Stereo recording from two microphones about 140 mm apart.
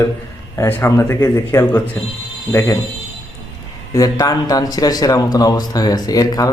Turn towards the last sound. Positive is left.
turn(degrees=25)  # may be behind; listen again after turning